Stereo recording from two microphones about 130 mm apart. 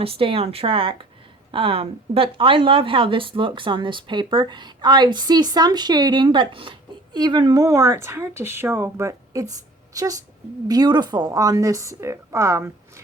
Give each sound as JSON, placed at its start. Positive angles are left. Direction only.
{"t": 0.0, "sound": "a woman's voice", "side_deg": -45}